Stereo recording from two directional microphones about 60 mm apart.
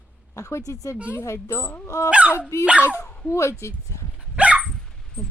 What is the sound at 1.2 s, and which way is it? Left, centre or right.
Speech, left.